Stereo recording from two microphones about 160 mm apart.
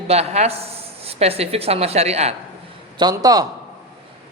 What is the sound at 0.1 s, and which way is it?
A man's voice, 40° right (ahead or behind).